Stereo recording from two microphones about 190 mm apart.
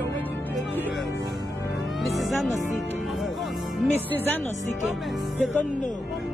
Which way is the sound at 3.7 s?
Centre (ahead or behind).